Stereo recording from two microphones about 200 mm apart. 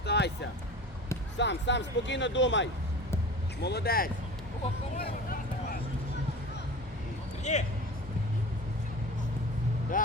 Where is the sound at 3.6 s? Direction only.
50° left (ahead or behind).